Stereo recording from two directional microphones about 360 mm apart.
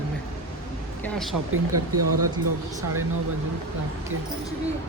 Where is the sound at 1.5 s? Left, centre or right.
Right.